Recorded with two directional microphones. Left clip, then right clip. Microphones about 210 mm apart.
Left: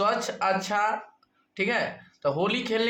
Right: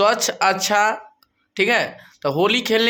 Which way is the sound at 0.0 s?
40° right (ahead or behind).